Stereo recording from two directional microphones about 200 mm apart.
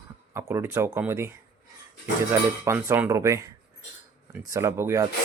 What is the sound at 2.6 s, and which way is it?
Speech, 15° right (ahead or behind).